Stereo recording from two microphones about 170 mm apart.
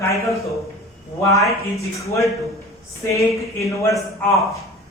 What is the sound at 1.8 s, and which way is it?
A man's voice, 20° left (ahead or behind).